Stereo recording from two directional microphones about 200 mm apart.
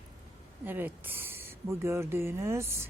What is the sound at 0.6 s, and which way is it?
Speech, 10° right (ahead or behind).